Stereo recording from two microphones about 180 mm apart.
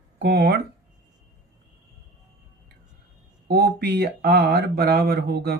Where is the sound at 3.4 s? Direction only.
65° right (ahead or behind).